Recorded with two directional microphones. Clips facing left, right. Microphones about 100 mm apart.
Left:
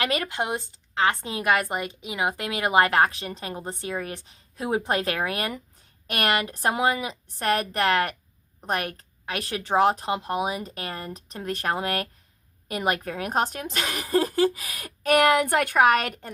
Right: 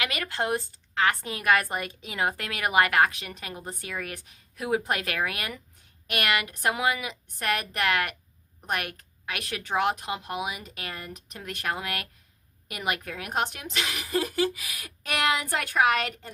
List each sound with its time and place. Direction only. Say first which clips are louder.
0.0 s a woman's voice: left 6 dB; 35° left (ahead or behind)
0.3 s a woman's voice: even; 15° left (ahead or behind); by 16.3 s 50° left (ahead or behind)